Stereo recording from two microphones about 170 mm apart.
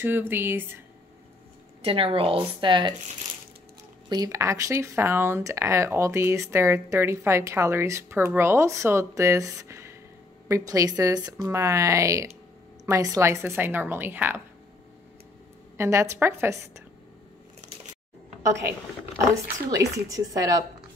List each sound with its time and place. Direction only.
0.0 s speech: 10° right (ahead or behind)
1.8 s speech: 30° right (ahead or behind)
4.1 s speech: 20° right (ahead or behind)
15.8 s speech: 15° right (ahead or behind)
19.1 s speech: 15° right (ahead or behind)